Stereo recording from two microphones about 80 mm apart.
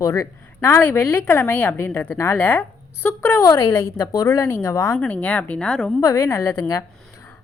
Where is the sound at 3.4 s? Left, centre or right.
Left.